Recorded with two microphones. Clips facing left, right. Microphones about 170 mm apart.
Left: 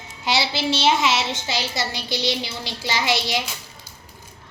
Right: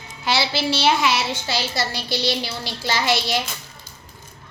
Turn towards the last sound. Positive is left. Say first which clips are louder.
# right 1 dB
turn(degrees=15)  # may be behind; listen again after turning